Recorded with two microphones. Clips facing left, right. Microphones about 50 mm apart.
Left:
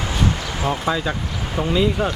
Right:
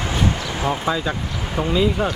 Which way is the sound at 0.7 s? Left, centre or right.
Centre.